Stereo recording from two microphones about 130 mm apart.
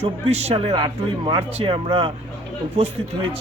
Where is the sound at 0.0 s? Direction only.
55° right (ahead or behind).